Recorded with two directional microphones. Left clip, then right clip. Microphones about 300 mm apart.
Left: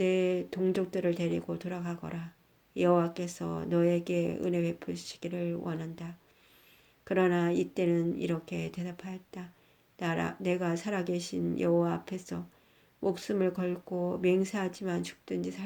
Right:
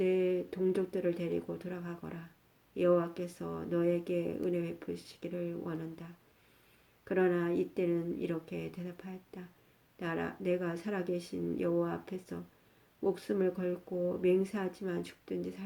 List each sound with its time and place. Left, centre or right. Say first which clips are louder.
0.0 s speech: left 2 dB; left